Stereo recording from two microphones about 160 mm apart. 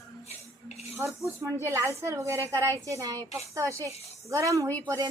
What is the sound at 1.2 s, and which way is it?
A woman's voice, 15° right (ahead or behind).